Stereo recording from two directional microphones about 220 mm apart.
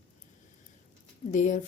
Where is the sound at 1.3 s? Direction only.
35° left (ahead or behind).